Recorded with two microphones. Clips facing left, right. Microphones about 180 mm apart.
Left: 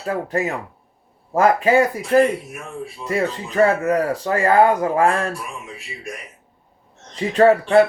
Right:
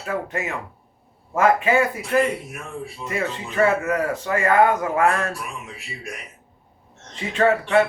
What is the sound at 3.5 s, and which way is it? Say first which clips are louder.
Speech: left 3 dB; 35° left (ahead or behind).